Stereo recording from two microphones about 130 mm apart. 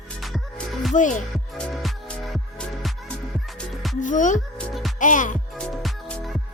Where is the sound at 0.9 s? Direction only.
75° left (ahead or behind).